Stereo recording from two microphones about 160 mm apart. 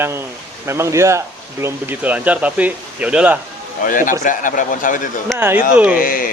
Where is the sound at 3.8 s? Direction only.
55° left (ahead or behind).